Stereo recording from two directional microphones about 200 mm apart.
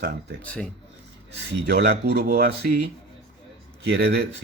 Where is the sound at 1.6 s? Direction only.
55° right (ahead or behind).